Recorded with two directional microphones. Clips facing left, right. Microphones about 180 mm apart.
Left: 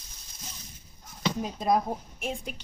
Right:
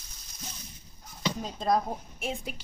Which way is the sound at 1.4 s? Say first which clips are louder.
Left 1 dB; 10° left (ahead or behind).